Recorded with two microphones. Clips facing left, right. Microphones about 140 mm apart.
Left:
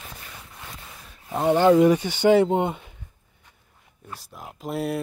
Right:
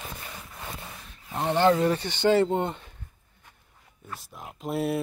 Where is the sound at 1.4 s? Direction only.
10° left (ahead or behind).